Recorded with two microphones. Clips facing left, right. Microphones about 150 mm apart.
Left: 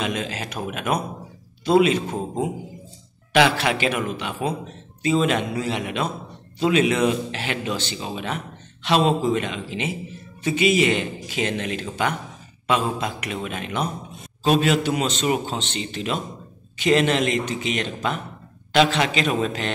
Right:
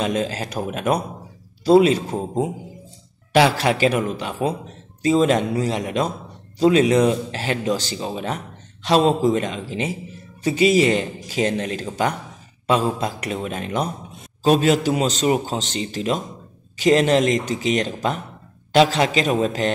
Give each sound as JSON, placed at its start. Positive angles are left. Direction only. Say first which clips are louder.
{"t": 0.0, "sound": "speech", "louder": "right 4 dB", "side_deg": -35}